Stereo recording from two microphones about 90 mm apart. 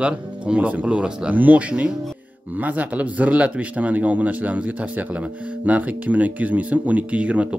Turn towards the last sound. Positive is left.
turn(degrees=-15)  # may be behind; listen again after turning